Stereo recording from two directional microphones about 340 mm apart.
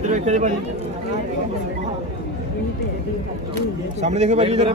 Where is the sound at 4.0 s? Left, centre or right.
Centre.